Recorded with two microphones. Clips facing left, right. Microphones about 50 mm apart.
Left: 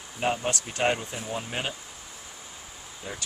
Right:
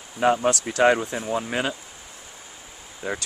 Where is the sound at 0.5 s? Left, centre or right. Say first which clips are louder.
Right 8 dB; right.